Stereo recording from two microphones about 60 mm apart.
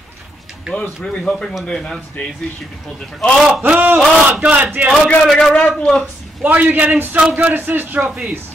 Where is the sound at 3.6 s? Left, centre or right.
Right.